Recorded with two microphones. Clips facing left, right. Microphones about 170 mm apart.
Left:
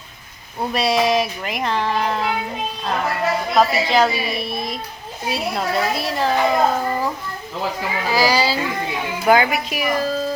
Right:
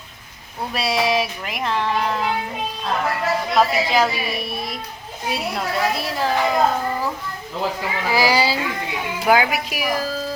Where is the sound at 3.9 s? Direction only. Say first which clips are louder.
Left 2 dB; 10° right (ahead or behind).